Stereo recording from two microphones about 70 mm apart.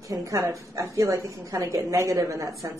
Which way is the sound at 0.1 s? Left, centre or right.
Right.